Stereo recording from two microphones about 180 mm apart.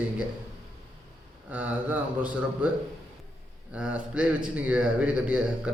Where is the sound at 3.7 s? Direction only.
5° right (ahead or behind).